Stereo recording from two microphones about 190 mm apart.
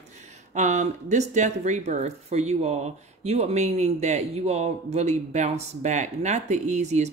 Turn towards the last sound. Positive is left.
turn(degrees=-35)  # may be behind; listen again after turning